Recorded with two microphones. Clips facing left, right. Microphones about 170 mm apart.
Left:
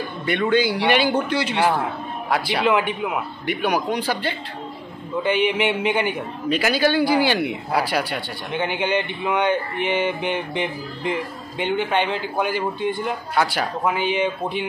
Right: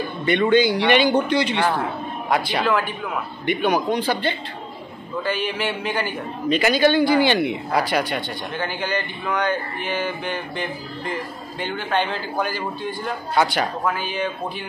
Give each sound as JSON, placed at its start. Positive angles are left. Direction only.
{"t": 0.2, "sound": "a man's voice", "side_deg": 5}
{"t": 2.7, "sound": "speech", "side_deg": 20}
{"t": 3.4, "sound": "a man's voice", "side_deg": 10}
{"t": 5.2, "sound": "speech", "side_deg": 20}
{"t": 6.5, "sound": "a man's voice", "side_deg": 5}
{"t": 8.5, "sound": "a man's voice", "side_deg": 20}
{"t": 13.3, "sound": "a man's voice", "side_deg": 0}
{"t": 13.8, "sound": "speech", "side_deg": 20}